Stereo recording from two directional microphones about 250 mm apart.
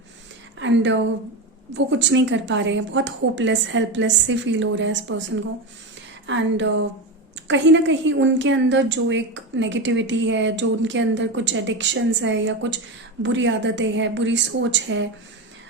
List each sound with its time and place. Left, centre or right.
0.6 s a woman's voice: right
6.2 s a woman's voice: right